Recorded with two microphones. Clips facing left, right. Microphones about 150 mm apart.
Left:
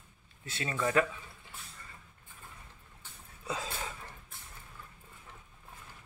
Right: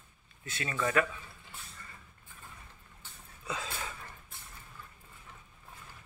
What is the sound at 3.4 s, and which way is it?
Speech, 35° left (ahead or behind).